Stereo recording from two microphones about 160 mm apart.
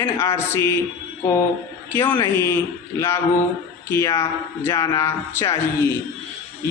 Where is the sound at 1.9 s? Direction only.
15° left (ahead or behind).